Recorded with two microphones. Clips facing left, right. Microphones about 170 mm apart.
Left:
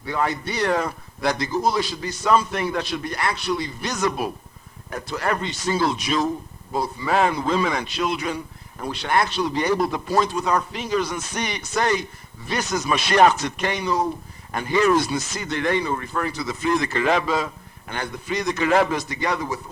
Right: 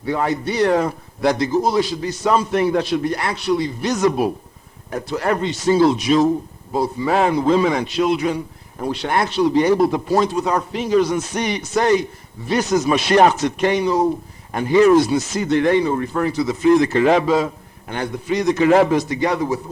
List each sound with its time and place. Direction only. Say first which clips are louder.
0.0 s speech: right 4 dB; 25° right (ahead or behind)